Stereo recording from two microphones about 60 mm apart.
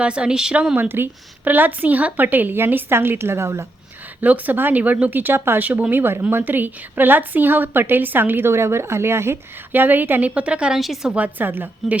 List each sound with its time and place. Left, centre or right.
0.0 s speech: centre
0.8 s a woman's voice: right
4.2 s a woman's voice: right
9.8 s speech: right
10.8 s a woman's voice: centre
11.1 s a woman's voice: right